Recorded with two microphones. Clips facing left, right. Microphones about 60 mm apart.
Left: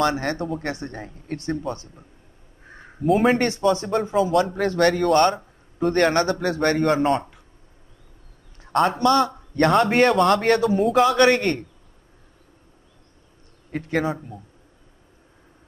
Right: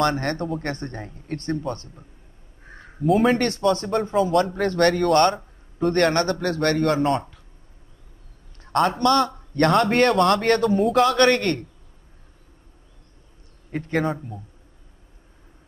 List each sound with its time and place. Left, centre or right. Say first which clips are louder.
0.0 s speech: even; centre
3.0 s speech: even; centre
3.3 s speech: left 1 dB; centre
8.5 s speech: left 1 dB; centre
13.7 s speech: even; centre